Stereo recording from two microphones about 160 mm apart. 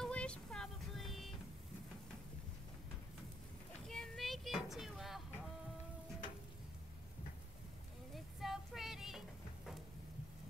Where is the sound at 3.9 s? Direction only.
Centre (ahead or behind).